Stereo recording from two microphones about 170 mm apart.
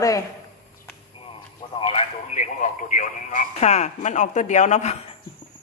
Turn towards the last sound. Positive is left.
turn(degrees=45)  # may be behind; listen again after turning